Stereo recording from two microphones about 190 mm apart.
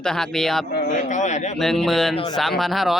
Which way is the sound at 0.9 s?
40° left (ahead or behind).